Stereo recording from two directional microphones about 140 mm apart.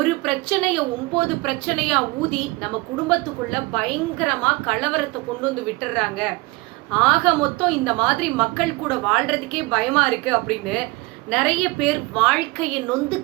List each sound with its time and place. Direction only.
0.0 s a woman's voice: centre (ahead or behind)